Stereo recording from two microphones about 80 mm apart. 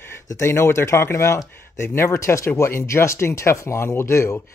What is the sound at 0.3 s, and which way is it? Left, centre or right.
Speech, left.